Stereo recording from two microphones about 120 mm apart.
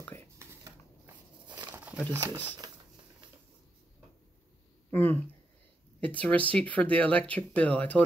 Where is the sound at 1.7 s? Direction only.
15° right (ahead or behind).